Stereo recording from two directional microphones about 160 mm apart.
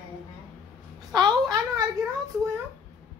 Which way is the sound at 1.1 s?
25° right (ahead or behind).